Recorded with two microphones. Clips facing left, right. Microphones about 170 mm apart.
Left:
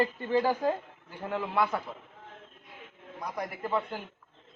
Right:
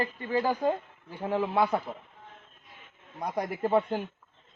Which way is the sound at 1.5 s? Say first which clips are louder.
Right 1 dB; 35° right (ahead or behind).